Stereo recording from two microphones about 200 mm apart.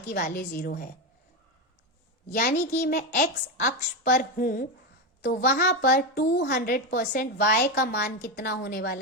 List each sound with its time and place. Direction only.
0.1 s a woman's voice: 50° left (ahead or behind)
2.3 s a woman's voice: 45° left (ahead or behind)